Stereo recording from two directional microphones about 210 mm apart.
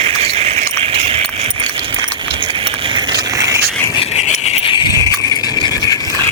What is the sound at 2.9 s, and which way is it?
Mechanisms, 20° right (ahead or behind).